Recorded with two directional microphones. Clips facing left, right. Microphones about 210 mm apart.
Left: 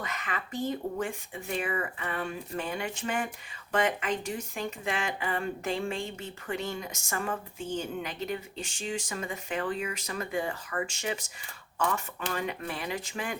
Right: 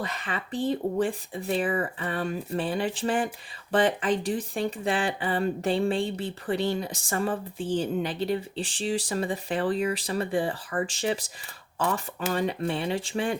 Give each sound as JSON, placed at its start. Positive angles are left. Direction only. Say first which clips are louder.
{"t": 0.0, "sound": "speech", "louder": "right 4 dB", "side_deg": -35}